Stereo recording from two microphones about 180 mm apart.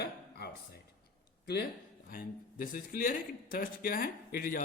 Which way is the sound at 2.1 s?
50° left (ahead or behind).